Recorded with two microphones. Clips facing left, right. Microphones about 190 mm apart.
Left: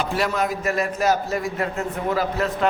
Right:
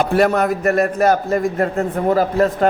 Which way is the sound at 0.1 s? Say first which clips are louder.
Right 8 dB; 60° right (ahead or behind).